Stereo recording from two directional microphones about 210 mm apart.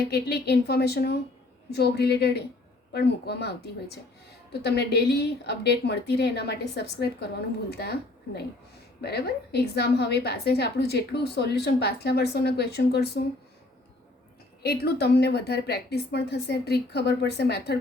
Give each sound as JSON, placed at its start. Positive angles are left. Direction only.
{"t": 0.0, "sound": "a woman's voice", "side_deg": 50}
{"t": 14.6, "sound": "a woman's voice", "side_deg": 50}